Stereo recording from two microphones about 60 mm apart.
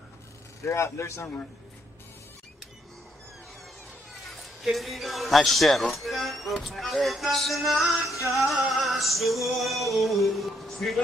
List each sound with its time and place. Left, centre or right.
0.7 s a man's voice: left
4.3 s a man's voice: centre